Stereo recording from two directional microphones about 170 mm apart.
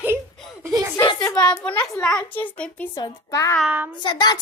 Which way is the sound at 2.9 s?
20° left (ahead or behind).